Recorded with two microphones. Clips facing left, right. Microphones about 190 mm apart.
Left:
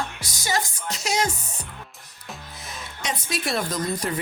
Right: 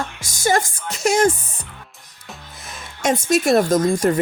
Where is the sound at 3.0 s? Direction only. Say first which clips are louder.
Right 12 dB; 45° right (ahead or behind).